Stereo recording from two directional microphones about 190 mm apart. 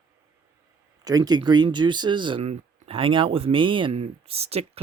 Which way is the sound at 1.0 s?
20° right (ahead or behind).